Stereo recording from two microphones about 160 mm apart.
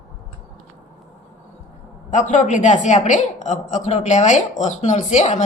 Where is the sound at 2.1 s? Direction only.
50° left (ahead or behind).